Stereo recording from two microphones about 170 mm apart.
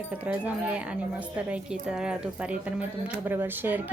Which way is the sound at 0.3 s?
10° right (ahead or behind).